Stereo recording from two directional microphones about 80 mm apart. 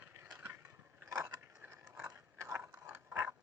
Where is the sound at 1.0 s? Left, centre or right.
Right.